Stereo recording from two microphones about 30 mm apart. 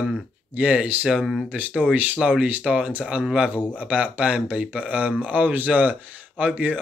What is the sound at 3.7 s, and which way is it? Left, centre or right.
Speech, right.